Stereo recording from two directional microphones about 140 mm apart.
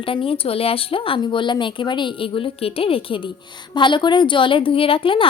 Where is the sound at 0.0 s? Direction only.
40° left (ahead or behind).